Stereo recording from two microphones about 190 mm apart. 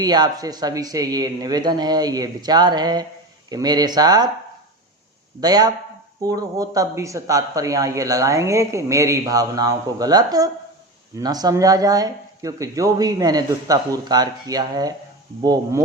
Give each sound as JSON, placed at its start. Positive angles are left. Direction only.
{"t": 0.0, "sound": "speech", "side_deg": -20}
{"t": 5.4, "sound": "a man's voice", "side_deg": -20}